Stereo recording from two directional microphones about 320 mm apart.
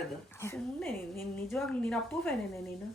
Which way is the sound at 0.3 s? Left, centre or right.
Centre.